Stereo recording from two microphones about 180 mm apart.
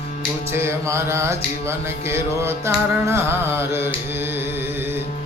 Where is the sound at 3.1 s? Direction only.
15° right (ahead or behind).